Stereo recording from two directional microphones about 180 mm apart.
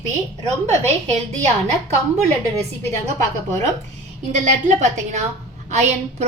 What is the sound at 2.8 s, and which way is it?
A woman's voice, 40° right (ahead or behind).